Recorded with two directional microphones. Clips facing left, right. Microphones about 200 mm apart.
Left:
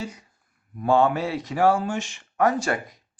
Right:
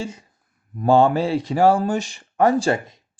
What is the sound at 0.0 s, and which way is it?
Speech, 30° right (ahead or behind).